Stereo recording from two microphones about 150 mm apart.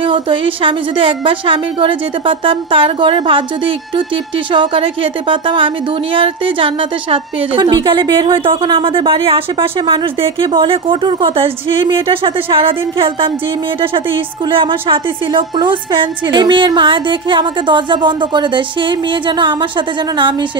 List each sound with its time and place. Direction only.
0.0 s a woman's voice: 35° right (ahead or behind)